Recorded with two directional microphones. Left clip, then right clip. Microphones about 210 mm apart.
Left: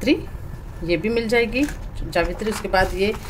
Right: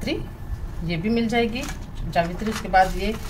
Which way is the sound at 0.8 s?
50° left (ahead or behind).